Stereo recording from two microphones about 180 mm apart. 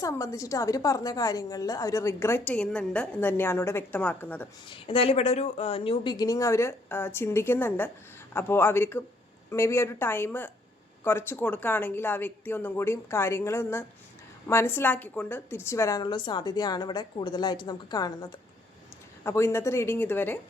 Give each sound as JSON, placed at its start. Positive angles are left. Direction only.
{"t": 0.0, "sound": "a woman's voice", "side_deg": 15}
{"t": 4.7, "sound": "a woman's voice", "side_deg": 30}